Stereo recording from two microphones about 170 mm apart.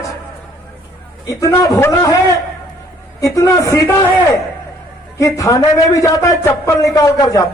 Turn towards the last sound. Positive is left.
turn(degrees=20)  # may be behind; listen again after turning